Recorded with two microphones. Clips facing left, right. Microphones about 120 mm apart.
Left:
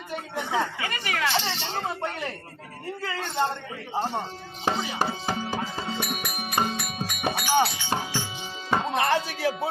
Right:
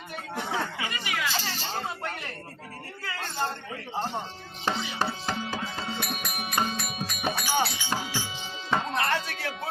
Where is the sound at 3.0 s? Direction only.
25° left (ahead or behind).